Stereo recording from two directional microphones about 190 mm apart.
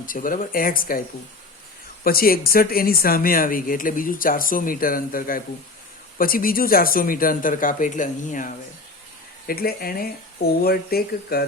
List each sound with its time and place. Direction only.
0.0 s speech: 45° left (ahead or behind)
2.0 s speech: 50° left (ahead or behind)